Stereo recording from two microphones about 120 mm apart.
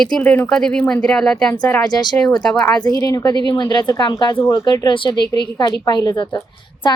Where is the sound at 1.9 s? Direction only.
35° left (ahead or behind).